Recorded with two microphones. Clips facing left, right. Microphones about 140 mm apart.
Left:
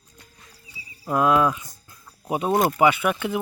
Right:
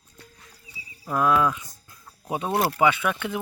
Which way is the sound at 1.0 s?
20° left (ahead or behind).